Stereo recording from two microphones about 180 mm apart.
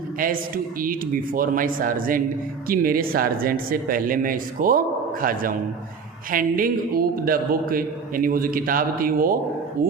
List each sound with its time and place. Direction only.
0.2 s a man's voice: 50° right (ahead or behind)